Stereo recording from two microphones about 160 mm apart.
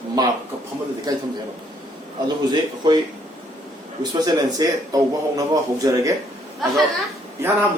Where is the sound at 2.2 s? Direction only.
25° right (ahead or behind).